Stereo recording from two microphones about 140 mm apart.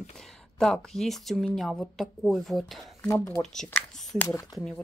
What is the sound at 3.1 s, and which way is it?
Speech, 20° left (ahead or behind).